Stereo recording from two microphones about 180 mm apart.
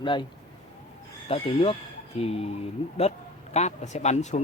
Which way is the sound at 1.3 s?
30° left (ahead or behind).